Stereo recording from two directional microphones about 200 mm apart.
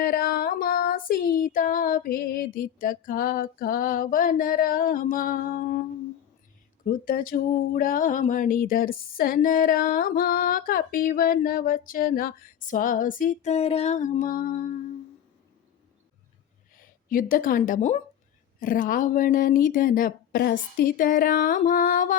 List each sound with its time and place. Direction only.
0.0 s speech: 45° left (ahead or behind)
6.8 s speech: 45° left (ahead or behind)
16.7 s speech: 45° left (ahead or behind)